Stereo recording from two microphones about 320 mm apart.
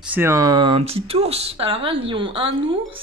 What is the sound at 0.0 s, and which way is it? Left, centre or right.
Speech, centre.